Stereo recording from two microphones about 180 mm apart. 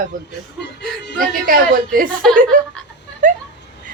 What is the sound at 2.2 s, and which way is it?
Speech, 5° left (ahead or behind).